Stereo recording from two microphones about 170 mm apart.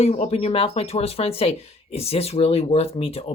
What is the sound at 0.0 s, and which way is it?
Speech, 35° left (ahead or behind).